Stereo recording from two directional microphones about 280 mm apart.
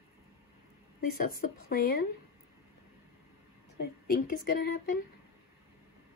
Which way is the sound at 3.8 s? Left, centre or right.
Left.